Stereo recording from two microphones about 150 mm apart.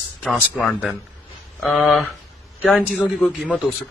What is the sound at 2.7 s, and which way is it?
A man's voice, centre (ahead or behind).